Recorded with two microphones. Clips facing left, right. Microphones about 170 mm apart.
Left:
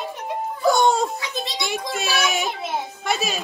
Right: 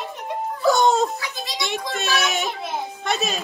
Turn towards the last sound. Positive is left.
turn(degrees=0)  # may be behind; listen again after turning